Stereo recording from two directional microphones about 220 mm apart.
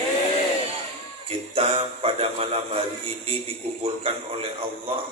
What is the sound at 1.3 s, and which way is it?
Speech, 25° right (ahead or behind).